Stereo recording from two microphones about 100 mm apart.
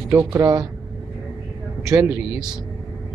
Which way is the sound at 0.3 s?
30° right (ahead or behind).